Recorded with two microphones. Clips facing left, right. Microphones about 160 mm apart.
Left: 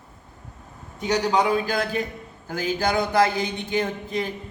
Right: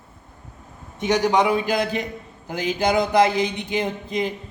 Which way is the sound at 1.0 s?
20° right (ahead or behind).